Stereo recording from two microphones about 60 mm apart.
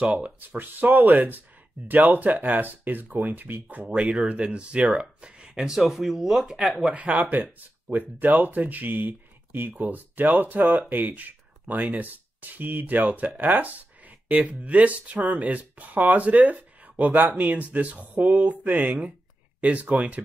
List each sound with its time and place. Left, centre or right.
0.2 s speech: right; by 6.7 s centre
6.9 s speech: right
7.3 s speech: right